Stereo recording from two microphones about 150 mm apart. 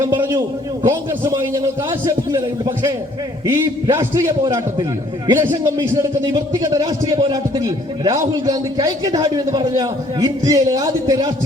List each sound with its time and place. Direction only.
0.3 s a man's voice: 25° right (ahead or behind)